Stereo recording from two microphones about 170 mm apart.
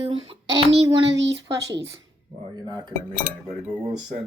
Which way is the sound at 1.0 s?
90° right.